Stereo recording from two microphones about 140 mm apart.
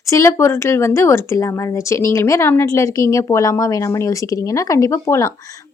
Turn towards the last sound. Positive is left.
turn(degrees=20)  # may be behind; listen again after turning